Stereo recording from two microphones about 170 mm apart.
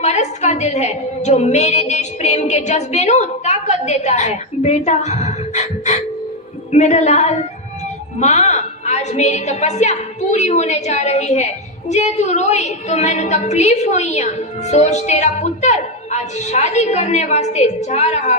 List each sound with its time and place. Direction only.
0.0 s a woman's voice: 40° left (ahead or behind)